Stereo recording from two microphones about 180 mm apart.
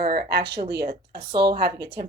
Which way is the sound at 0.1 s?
60° right (ahead or behind).